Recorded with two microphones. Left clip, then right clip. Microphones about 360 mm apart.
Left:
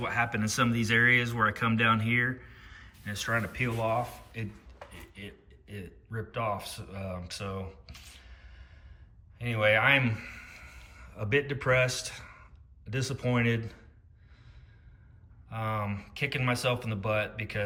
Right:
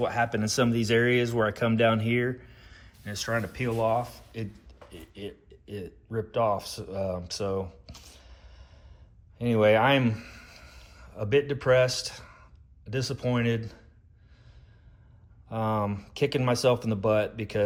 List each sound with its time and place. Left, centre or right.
0.0 s a man's voice: centre
15.4 s speech: centre